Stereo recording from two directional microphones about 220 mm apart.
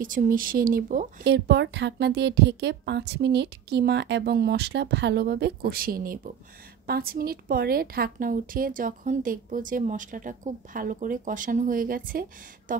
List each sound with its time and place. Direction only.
0.0 s a woman's voice: 40° right (ahead or behind)
1.2 s a woman's voice: 50° right (ahead or behind)